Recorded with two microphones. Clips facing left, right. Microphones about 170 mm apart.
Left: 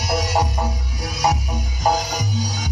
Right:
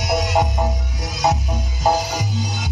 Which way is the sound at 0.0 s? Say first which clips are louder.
Right 2 dB; 20° right (ahead or behind).